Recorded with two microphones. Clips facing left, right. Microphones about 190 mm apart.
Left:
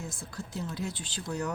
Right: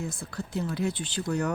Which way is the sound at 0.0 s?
60° right (ahead or behind).